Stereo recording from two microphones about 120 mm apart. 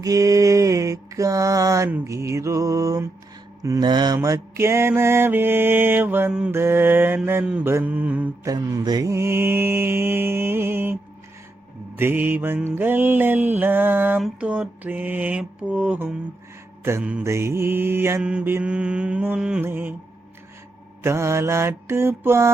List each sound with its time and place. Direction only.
0.0 s mantra: 30° right (ahead or behind); by 8.3 s 10° right (ahead or behind)
8.4 s mantra: 30° right (ahead or behind)
11.9 s mantra: 15° right (ahead or behind)
17.2 s mantra: 25° right (ahead or behind)
18.2 s mantra: 10° right (ahead or behind)
21.0 s mantra: 20° right (ahead or behind)